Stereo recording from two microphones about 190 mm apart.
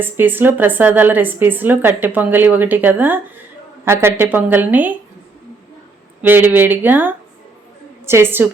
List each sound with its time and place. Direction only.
0.0 s a woman's voice: 10° right (ahead or behind)
6.2 s a woman's voice: 10° right (ahead or behind)